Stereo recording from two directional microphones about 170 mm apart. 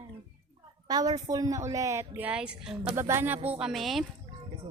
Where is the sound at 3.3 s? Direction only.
35° right (ahead or behind).